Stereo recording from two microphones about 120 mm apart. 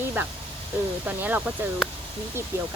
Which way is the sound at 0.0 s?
15° right (ahead or behind).